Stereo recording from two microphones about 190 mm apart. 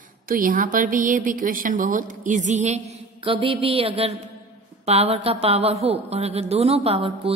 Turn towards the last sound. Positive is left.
turn(degrees=-30)  # may be behind; listen again after turning